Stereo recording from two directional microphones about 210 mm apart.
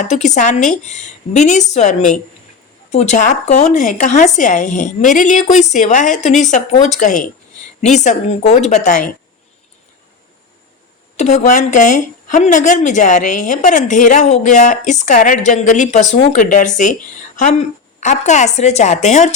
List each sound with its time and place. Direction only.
0.0 s a woman's voice: 35° left (ahead or behind)
11.2 s a woman's voice: 35° left (ahead or behind)